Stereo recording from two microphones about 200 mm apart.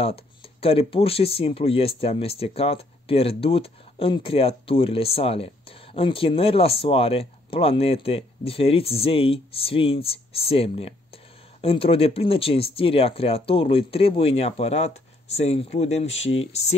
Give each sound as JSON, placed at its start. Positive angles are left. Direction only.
{"t": 0.0, "sound": "speech", "side_deg": 30}